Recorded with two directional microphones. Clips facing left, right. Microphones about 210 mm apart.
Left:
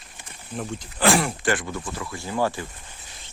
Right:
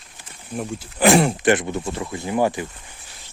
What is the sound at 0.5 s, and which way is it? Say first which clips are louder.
Speech: right 3 dB; 10° right (ahead or behind).